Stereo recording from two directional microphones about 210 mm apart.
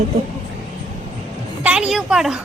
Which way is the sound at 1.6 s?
5° right (ahead or behind).